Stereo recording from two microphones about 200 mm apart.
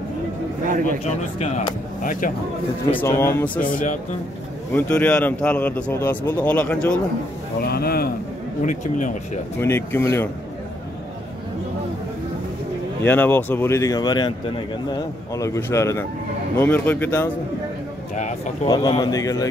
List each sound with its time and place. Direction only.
2.0 s speech: 40° left (ahead or behind)
2.9 s speech: 10° left (ahead or behind)
3.6 s speech: 40° left (ahead or behind)
4.7 s speech: 5° left (ahead or behind)
7.6 s a man's voice: 50° left (ahead or behind)
8.6 s speech: 40° left (ahead or behind)
9.6 s speech: 10° left (ahead or behind)
13.0 s speech: 10° left (ahead or behind)
18.7 s speech: 20° left (ahead or behind)